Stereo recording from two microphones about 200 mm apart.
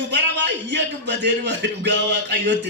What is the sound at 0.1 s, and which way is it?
A man's voice, 60° right (ahead or behind).